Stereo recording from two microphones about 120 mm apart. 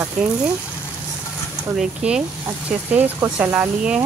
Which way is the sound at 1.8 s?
5° right (ahead or behind).